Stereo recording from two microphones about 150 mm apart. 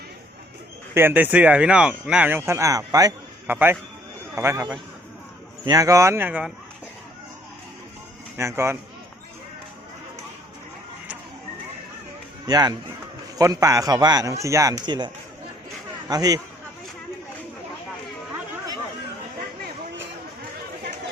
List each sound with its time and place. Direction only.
0.9 s a man's voice: 15° right (ahead or behind)
5.6 s speech: 25° right (ahead or behind)
8.4 s speech: 20° right (ahead or behind)
12.5 s speech: 25° right (ahead or behind)